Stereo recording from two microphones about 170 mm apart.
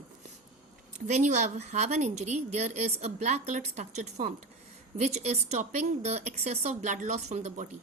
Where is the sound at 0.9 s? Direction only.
45° right (ahead or behind).